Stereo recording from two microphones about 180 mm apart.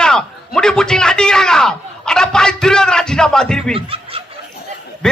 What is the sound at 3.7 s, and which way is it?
Speech, 30° right (ahead or behind).